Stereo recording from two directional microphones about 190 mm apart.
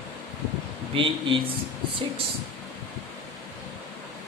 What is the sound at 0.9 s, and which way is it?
Speech, 30° right (ahead or behind).